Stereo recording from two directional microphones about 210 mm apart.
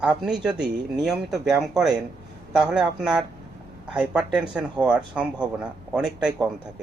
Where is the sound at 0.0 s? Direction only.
5° right (ahead or behind).